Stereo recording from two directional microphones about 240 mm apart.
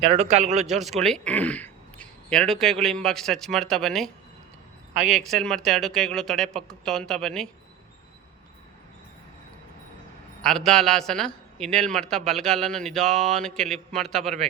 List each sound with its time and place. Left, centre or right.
0.0 s a man's voice: right
0.7 s a man's voice: centre
10.4 s a man's voice: centre